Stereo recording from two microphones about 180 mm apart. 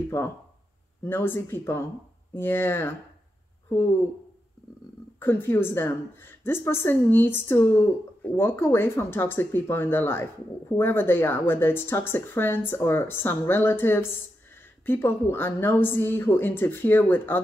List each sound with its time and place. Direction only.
0.1 s speech: 15° left (ahead or behind)
5.2 s speech: 10° left (ahead or behind)